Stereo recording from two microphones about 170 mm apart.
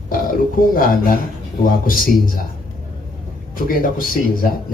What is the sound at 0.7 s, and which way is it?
Speech, 55° left (ahead or behind).